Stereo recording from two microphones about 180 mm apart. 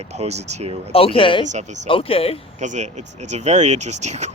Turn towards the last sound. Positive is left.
turn(degrees=-40)  # may be behind; listen again after turning